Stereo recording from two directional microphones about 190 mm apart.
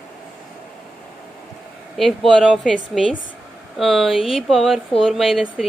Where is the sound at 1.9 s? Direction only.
Centre (ahead or behind).